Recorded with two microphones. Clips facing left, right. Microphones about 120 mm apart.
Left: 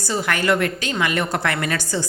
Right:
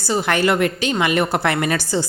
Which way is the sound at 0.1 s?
20° right (ahead or behind).